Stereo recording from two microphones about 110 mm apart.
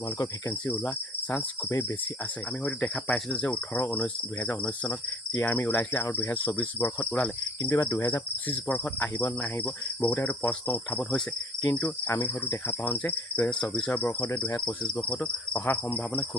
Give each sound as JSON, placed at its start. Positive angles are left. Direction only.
{"t": 0.6, "sound": "cricket", "side_deg": 15}